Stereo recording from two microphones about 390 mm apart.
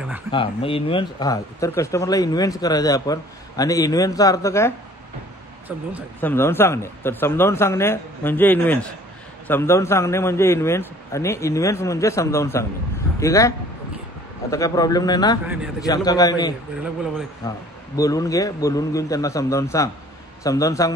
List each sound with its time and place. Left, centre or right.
0.3 s speech: centre
5.7 s speech: centre
14.5 s speech: centre
15.4 s speech: centre
15.8 s speech: centre